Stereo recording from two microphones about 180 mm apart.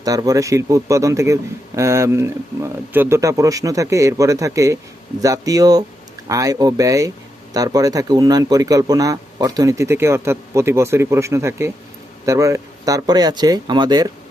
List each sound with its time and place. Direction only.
0.0 s speech: 20° right (ahead or behind)